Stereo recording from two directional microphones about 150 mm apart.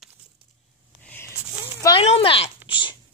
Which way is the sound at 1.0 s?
10° left (ahead or behind).